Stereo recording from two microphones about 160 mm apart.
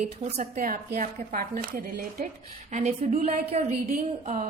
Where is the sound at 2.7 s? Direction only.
45° right (ahead or behind).